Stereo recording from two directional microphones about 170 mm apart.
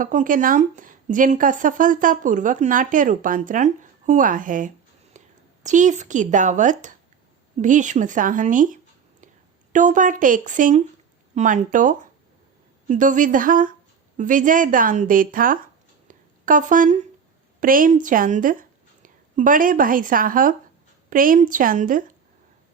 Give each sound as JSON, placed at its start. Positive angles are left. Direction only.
{"t": 0.0, "sound": "speech", "side_deg": -50}
{"t": 5.2, "sound": "whispering", "side_deg": -45}
{"t": 5.6, "sound": "speech", "side_deg": -45}
{"t": 16.0, "sound": "a sound", "side_deg": -50}
{"t": 17.6, "sound": "speech", "side_deg": -55}